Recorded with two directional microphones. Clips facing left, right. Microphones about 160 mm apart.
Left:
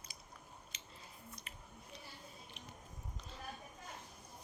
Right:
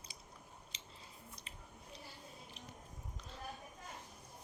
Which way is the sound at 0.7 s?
30° right (ahead or behind).